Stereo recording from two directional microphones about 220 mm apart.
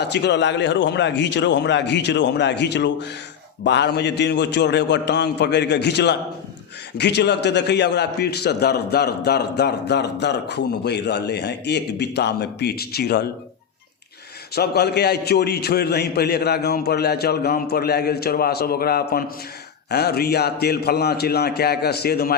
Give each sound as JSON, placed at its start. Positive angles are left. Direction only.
{"t": 0.0, "sound": "a man's voice", "side_deg": 50}
{"t": 14.5, "sound": "a man's voice", "side_deg": 45}